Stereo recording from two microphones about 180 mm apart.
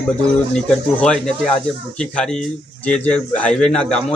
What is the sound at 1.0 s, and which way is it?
Speech, 5° left (ahead or behind).